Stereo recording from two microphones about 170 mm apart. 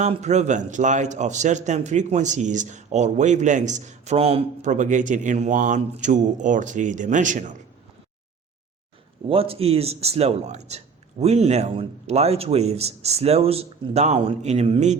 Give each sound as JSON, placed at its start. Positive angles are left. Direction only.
{"t": 0.0, "sound": "a man's voice", "side_deg": -40}
{"t": 9.3, "sound": "a man's voice", "side_deg": -35}